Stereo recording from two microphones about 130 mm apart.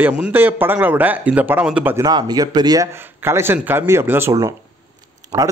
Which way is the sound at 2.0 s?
30° right (ahead or behind).